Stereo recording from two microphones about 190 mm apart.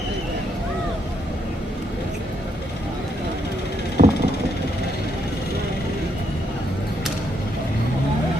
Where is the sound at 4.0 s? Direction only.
50° right (ahead or behind).